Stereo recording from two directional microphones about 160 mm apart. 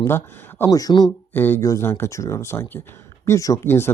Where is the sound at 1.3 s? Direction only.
15° left (ahead or behind).